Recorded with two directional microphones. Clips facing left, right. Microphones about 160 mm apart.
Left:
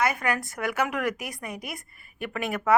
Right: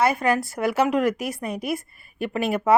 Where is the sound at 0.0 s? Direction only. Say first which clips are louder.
Right 5 dB; 30° right (ahead or behind).